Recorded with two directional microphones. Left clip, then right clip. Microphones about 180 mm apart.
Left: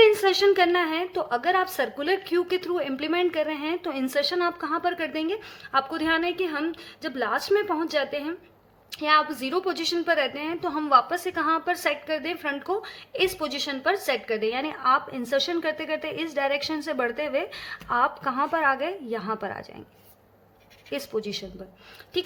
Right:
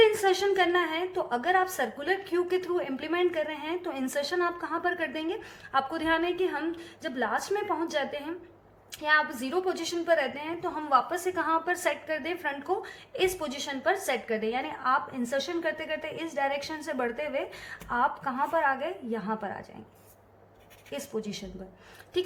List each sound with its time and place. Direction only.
0.0 s a woman's voice: 30° left (ahead or behind)
21.2 s speech: 30° left (ahead or behind)